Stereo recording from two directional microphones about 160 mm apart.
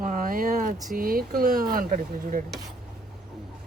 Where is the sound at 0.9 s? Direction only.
65° right (ahead or behind).